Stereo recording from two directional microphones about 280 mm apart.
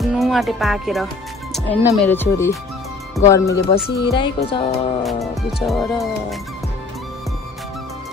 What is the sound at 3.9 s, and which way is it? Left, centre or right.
Speech, left.